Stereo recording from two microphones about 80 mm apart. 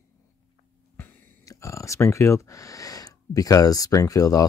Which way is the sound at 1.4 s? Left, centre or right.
Left.